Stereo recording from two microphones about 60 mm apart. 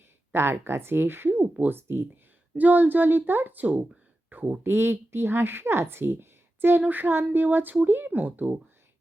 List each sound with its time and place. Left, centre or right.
0.3 s speech: right
4.7 s speech: right